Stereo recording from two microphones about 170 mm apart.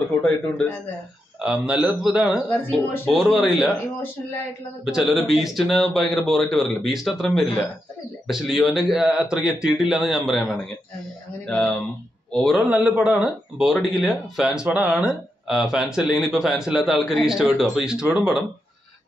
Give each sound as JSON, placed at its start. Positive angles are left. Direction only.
{"t": 1.4, "sound": "speech", "side_deg": -5}
{"t": 2.3, "sound": "speech", "side_deg": 15}
{"t": 3.1, "sound": "speech", "side_deg": 0}
{"t": 4.8, "sound": "speech", "side_deg": -5}